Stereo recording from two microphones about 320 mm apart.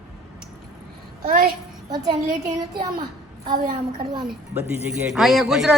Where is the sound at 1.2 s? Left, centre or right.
Right.